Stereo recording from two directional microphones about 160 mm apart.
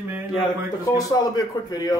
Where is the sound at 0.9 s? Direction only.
25° left (ahead or behind).